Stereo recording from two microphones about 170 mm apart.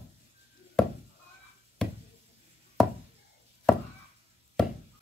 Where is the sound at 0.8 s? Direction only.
Centre (ahead or behind).